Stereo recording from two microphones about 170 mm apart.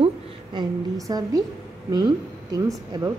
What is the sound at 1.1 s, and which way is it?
Speech, 20° right (ahead or behind).